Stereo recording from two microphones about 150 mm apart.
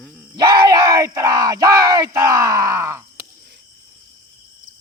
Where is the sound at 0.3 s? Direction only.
30° right (ahead or behind).